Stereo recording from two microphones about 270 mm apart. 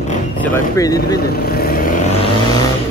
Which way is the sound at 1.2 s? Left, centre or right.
Left.